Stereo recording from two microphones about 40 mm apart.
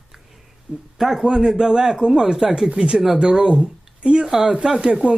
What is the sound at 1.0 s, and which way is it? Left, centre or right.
A man's voice, centre.